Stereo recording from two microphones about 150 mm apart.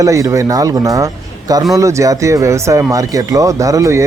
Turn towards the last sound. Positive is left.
turn(degrees=-20)  # may be behind; listen again after turning